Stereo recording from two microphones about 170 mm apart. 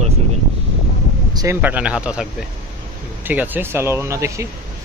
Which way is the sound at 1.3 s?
15° right (ahead or behind).